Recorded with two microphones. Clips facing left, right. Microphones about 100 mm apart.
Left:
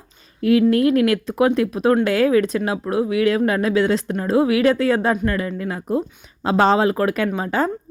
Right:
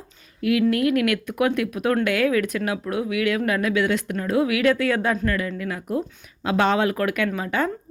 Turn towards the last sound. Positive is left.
turn(degrees=30)  # may be behind; listen again after turning